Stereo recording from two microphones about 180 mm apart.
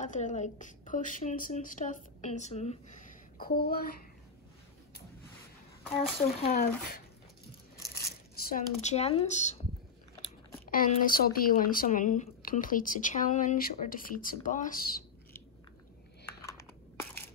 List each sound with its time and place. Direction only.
0.0 s a woman's voice: 40° left (ahead or behind); by 3.9 s 60° left (ahead or behind)
6.4 s a woman's voice: 45° left (ahead or behind)
8.5 s speech: 45° left (ahead or behind)
10.7 s a woman's voice: 50° left (ahead or behind)